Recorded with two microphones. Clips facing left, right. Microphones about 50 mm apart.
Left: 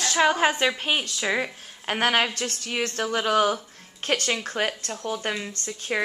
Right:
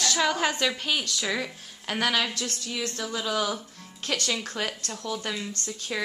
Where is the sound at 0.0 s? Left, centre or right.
Left.